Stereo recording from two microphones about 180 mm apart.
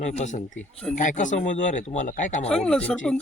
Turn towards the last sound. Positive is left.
turn(degrees=5)  # may be behind; listen again after turning